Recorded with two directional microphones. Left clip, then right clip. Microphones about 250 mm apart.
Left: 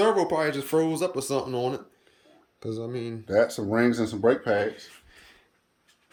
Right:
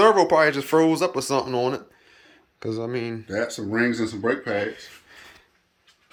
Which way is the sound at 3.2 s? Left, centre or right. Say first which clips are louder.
Left 8 dB; left.